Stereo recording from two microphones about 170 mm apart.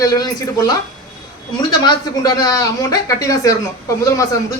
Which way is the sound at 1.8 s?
25° left (ahead or behind).